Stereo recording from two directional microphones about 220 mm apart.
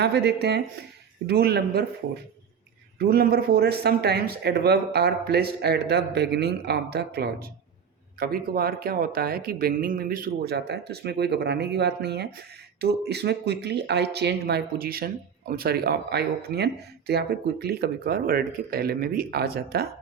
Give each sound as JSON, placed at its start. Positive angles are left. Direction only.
{"t": 0.0, "sound": "speech", "side_deg": -50}
{"t": 3.0, "sound": "speech", "side_deg": -45}